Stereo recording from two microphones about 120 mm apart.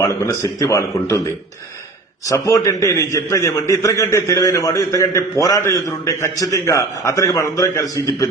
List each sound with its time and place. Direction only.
0.1 s a man's voice: 25° left (ahead or behind)
2.2 s a man's voice: 25° left (ahead or behind)